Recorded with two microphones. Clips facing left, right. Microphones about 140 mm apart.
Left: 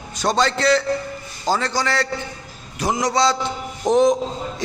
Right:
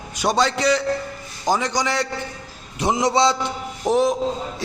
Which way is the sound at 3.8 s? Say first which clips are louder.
Left 3 dB; 5° right (ahead or behind).